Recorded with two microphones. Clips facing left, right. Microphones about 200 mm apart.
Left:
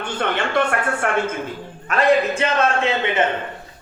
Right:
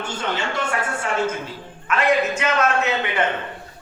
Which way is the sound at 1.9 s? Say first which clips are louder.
Left 3 dB; 35° left (ahead or behind).